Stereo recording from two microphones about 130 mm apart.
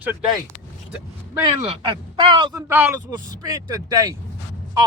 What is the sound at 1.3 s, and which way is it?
Speech, 20° right (ahead or behind).